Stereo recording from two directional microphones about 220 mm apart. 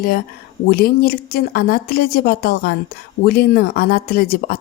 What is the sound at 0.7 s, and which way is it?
A woman's voice, 45° left (ahead or behind).